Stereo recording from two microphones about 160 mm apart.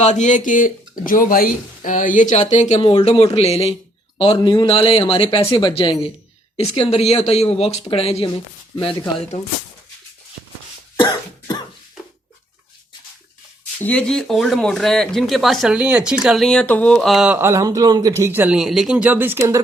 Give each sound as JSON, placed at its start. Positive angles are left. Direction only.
{"t": 0.0, "sound": "speech", "side_deg": 50}
{"t": 11.0, "sound": "cough", "side_deg": 25}
{"t": 13.8, "sound": "speech", "side_deg": 5}
{"t": 17.3, "sound": "speech", "side_deg": -15}